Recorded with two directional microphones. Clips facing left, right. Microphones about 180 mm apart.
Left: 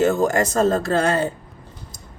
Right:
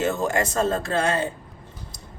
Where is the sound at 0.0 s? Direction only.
40° left (ahead or behind).